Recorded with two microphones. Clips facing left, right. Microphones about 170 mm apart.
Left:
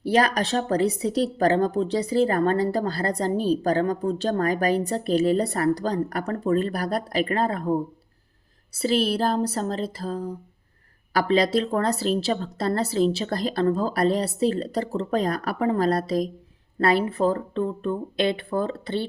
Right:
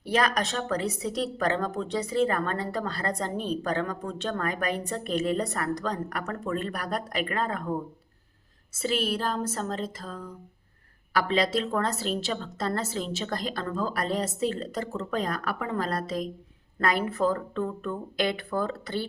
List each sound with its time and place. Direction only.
0.0 s a woman's voice: 35° left (ahead or behind)